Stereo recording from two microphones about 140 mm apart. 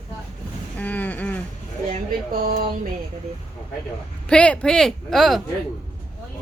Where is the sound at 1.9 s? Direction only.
90° right.